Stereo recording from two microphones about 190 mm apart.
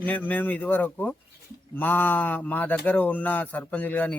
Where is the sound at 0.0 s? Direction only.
10° left (ahead or behind).